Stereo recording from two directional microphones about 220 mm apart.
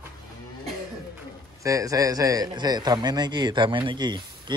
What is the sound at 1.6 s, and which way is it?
A man's voice, 15° right (ahead or behind).